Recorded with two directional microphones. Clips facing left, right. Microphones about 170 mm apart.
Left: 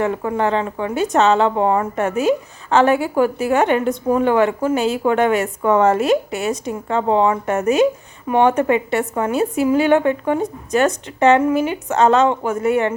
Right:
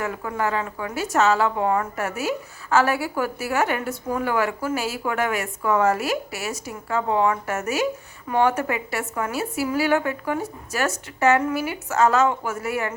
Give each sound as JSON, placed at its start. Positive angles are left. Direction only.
{"t": 0.0, "sound": "a woman's voice", "side_deg": 30}